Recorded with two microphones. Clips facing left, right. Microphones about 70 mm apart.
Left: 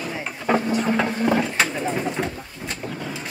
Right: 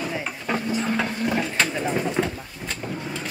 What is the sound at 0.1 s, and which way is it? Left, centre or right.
Vehicle, centre.